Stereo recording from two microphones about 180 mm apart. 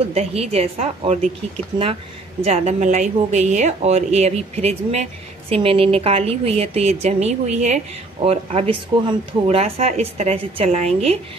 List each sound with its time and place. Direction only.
0.1 s speech: 35° right (ahead or behind)
2.4 s speech: 40° right (ahead or behind)